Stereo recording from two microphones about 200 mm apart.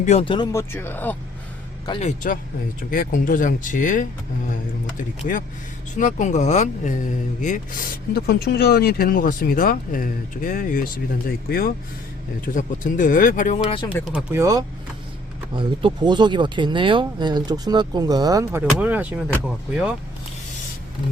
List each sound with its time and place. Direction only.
0.0 s speech: 30° left (ahead or behind)
0.5 s speech: 10° left (ahead or behind)
1.9 s speech: 35° left (ahead or behind)
5.3 s speech: 45° left (ahead or behind)
14.1 s speech: 10° right (ahead or behind)